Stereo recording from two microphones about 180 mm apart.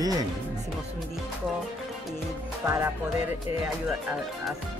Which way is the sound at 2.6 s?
10° right (ahead or behind).